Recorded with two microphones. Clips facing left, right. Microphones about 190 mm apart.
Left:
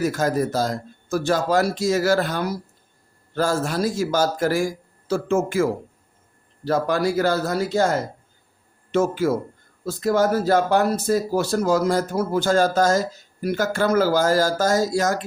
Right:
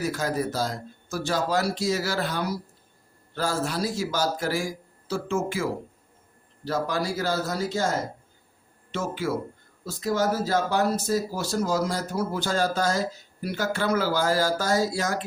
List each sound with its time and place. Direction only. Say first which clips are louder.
0.0 s speech: left 6 dB; 45° left (ahead or behind)
6.7 s speech: left 6 dB; 55° left (ahead or behind)
8.9 s speech: left 8 dB; 45° left (ahead or behind)